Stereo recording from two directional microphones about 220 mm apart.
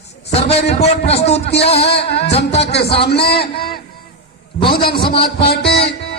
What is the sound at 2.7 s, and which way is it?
A man's voice, 50° left (ahead or behind).